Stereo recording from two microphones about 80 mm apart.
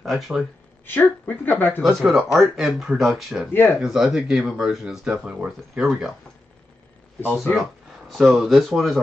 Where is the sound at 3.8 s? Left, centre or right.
Centre.